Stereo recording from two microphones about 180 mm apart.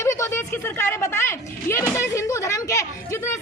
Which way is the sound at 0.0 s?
15° left (ahead or behind).